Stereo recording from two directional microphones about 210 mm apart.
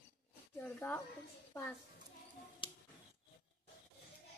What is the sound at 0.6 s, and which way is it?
Speech, 10° left (ahead or behind).